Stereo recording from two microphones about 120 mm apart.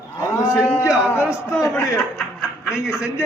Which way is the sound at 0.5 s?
25° left (ahead or behind).